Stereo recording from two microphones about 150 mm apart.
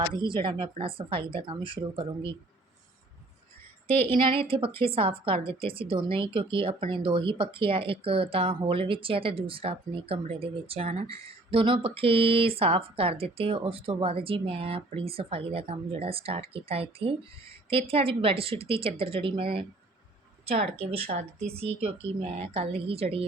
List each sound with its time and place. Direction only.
0.1 s speech: 30° right (ahead or behind)
4.2 s a woman's voice: 35° right (ahead or behind)